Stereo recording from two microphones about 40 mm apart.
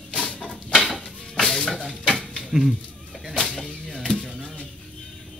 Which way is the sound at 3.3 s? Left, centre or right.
Left.